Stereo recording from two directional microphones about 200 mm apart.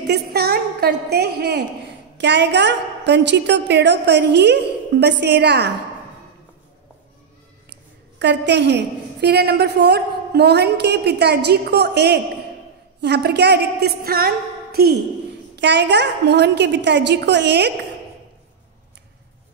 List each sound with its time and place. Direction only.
0.0 s a woman's voice: 55° right (ahead or behind)
8.2 s a woman's voice: 60° right (ahead or behind)